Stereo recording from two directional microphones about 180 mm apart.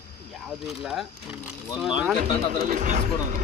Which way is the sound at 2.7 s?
45° right (ahead or behind).